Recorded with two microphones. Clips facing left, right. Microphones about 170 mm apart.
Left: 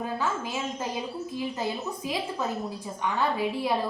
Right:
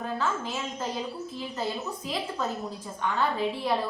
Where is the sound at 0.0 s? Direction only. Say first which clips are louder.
Even; 10° left (ahead or behind).